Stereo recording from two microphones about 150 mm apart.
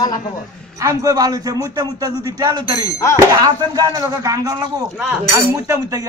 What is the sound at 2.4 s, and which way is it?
Speech, 30° right (ahead or behind).